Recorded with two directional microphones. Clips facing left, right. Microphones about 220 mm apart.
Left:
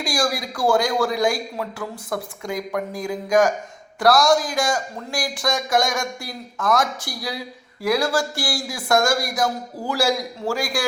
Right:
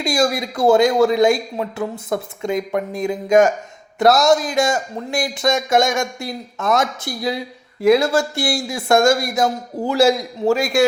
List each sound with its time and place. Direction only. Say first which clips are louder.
0.0 s speech: right 5 dB; 25° right (ahead or behind)